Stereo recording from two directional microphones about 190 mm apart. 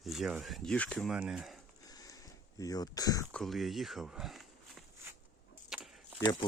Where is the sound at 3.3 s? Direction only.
Centre (ahead or behind).